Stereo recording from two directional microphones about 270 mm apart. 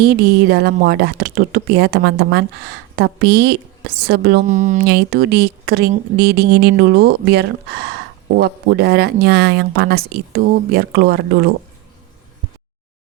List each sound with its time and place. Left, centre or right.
0.0 s speech: right